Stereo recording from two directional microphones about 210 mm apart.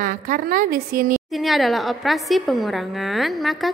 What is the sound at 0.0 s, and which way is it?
A woman's voice, 40° right (ahead or behind).